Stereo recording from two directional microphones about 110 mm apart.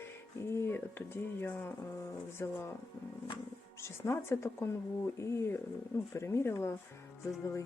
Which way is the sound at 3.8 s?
25° left (ahead or behind).